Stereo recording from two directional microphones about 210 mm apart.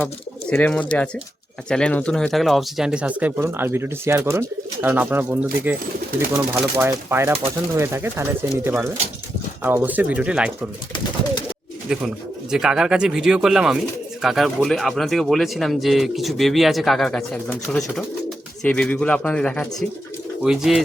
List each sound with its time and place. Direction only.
0.0 s speech: 10° left (ahead or behind)
11.9 s speech: 5° right (ahead or behind)